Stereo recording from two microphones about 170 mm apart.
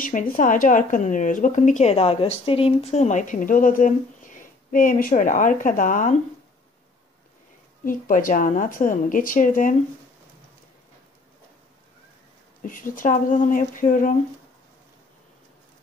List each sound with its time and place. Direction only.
0.0 s speech: 50° left (ahead or behind)
7.8 s speech: 55° left (ahead or behind)
12.6 s speech: 55° left (ahead or behind)